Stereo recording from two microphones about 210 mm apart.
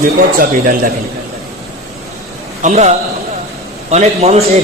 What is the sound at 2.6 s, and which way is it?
A man's voice, 35° right (ahead or behind).